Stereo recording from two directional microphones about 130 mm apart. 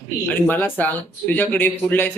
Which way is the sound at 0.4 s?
15° left (ahead or behind).